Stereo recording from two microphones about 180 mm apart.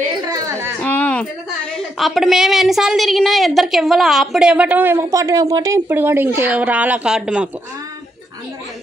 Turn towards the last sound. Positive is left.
turn(degrees=-5)  # may be behind; listen again after turning